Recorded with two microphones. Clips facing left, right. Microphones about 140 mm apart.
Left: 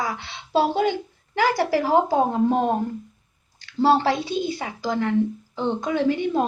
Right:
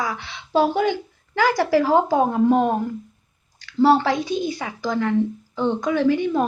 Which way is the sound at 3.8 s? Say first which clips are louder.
Right 2 dB; 25° left (ahead or behind).